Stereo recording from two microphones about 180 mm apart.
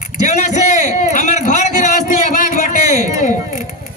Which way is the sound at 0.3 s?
40° left (ahead or behind).